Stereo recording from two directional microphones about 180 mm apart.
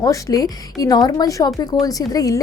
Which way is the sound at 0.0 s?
20° left (ahead or behind).